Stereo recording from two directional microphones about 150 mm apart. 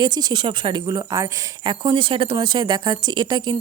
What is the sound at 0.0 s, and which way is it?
A woman's voice, 30° right (ahead or behind).